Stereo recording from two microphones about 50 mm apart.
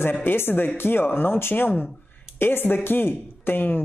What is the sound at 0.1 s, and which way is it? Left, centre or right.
Speech, left.